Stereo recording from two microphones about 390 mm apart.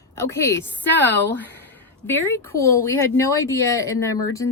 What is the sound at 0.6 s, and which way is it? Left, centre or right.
Speech, centre.